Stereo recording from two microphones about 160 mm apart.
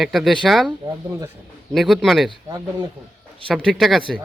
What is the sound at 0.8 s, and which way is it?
Speech, 20° right (ahead or behind).